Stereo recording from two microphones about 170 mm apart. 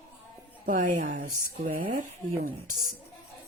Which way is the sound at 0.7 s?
50° right (ahead or behind).